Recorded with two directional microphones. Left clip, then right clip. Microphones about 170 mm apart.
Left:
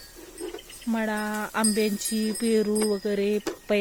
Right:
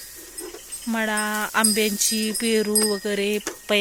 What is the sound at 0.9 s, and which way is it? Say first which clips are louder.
Speech: right 4 dB; 5° right (ahead or behind).